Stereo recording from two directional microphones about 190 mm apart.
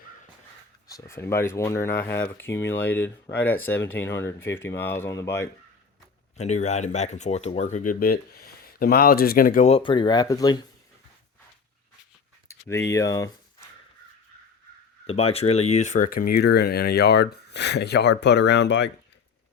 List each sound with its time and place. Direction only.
0.9 s speech: 15° left (ahead or behind)
6.3 s speech: 35° left (ahead or behind)
9.6 s speech: 30° left (ahead or behind)
12.5 s a sound: 15° left (ahead or behind)
15.0 s speech: 30° left (ahead or behind); by 18.9 s 65° left (ahead or behind)